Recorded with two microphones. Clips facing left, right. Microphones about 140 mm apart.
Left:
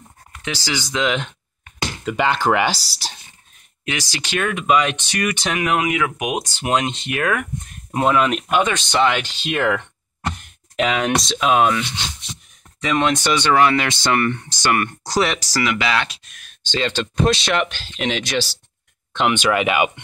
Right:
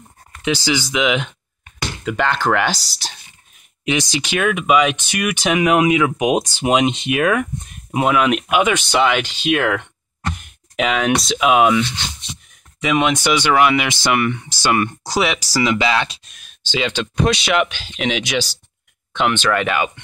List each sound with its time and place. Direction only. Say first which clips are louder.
0.4 s speech: right 7 dB; 15° right (ahead or behind)
2.0 s speech: even; 5° left (ahead or behind)
3.8 s speech: right 7 dB; 20° right (ahead or behind)
14.7 s speech: right 2 dB; 15° right (ahead or behind)
15.0 s speech: even; 5° right (ahead or behind)
15.6 s speech: right 3 dB; 20° right (ahead or behind)
16.6 s speech: right 1 dB; 5° right (ahead or behind); by 19.9 s 10° left (ahead or behind)